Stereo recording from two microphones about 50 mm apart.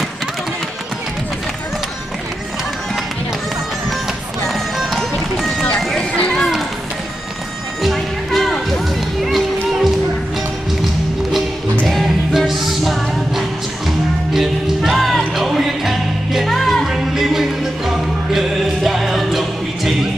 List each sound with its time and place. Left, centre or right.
4.5 s music: centre
5.9 s run: left
7.8 s music: centre
9.2 s music: centre
11.9 s music: centre
14.3 s music: centre
16.8 s music: centre